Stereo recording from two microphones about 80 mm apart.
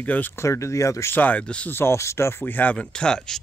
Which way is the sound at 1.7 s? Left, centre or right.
Left.